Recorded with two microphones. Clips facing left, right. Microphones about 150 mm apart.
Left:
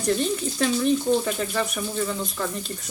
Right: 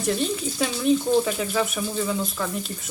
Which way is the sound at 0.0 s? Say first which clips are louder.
Left 1 dB; 5° right (ahead or behind).